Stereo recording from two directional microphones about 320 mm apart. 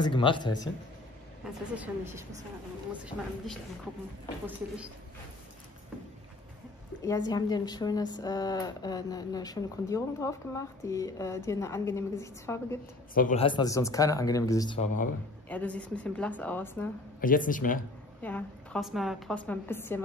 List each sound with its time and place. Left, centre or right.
0.0 s a woman's voice: centre
1.4 s a woman's voice: centre
7.1 s a woman's voice: centre
13.1 s a woman's voice: left
15.4 s a woman's voice: centre
17.2 s speech: left
18.2 s a woman's voice: centre